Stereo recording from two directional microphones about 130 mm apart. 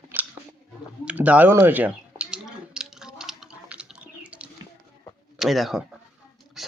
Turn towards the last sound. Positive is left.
turn(degrees=-5)  # may be behind; listen again after turning